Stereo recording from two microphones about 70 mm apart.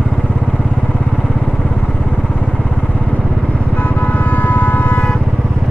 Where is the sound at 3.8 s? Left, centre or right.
Left.